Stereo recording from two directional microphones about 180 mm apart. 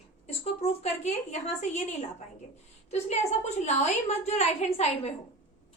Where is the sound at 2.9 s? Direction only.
35° left (ahead or behind).